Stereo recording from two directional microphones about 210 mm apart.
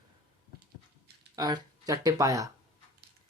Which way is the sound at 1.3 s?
15° right (ahead or behind).